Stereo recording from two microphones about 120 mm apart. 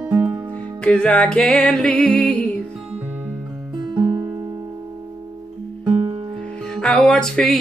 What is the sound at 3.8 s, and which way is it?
Music, 35° right (ahead or behind).